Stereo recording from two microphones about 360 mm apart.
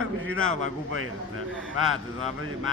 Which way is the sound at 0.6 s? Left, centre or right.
Right.